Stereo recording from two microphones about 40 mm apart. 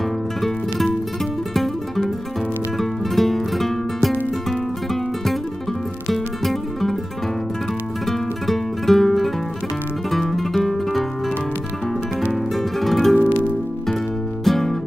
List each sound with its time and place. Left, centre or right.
0.4 s music: centre
6.1 s music: centre
8.1 s music: centre
12.3 s music: centre
13.1 s music: left
14.4 s music: centre